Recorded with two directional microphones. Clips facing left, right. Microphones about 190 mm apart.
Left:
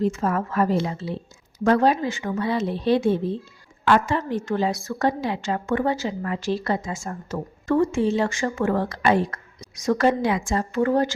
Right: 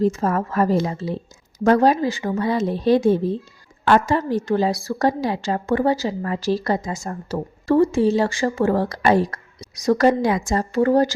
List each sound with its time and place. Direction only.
0.0 s a woman's voice: 40° right (ahead or behind)